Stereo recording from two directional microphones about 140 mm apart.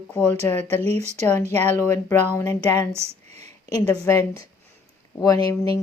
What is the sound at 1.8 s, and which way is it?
Speech, 15° left (ahead or behind).